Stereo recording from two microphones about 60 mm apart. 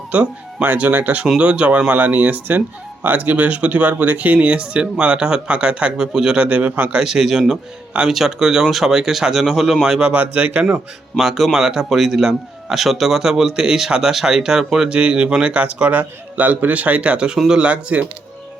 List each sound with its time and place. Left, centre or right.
0.1 s speech: right
7.0 s a man's voice: centre
10.2 s speech: right
11.2 s a man's voice: centre
14.9 s speech: centre
17.3 s a man's voice: centre
17.6 s speech: right